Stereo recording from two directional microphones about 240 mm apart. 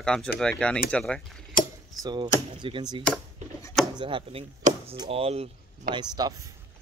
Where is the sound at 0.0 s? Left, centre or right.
Centre.